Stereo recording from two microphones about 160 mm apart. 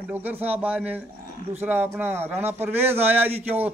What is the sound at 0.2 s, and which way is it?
A man's voice, 10° right (ahead or behind).